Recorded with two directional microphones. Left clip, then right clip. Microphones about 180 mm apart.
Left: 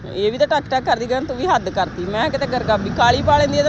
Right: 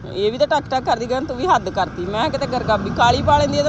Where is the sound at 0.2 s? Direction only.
Centre (ahead or behind).